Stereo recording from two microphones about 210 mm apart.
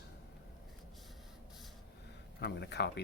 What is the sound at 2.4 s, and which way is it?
Speech, 55° left (ahead or behind).